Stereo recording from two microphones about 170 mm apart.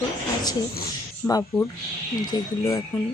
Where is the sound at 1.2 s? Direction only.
15° left (ahead or behind).